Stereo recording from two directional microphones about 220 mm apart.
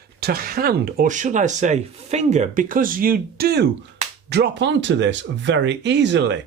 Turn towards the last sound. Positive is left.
turn(degrees=-55)  # may be behind; listen again after turning